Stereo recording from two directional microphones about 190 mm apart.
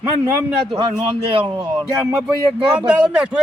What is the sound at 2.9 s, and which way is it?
Speech, 5° right (ahead or behind).